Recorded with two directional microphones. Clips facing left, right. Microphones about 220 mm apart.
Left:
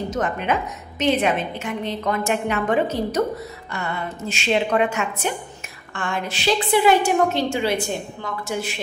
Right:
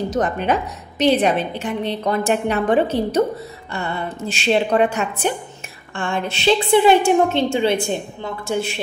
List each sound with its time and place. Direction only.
0.1 s a woman's voice: 35° right (ahead or behind)